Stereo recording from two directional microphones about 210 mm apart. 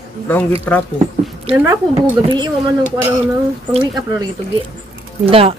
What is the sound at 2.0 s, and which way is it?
Speech, 20° right (ahead or behind).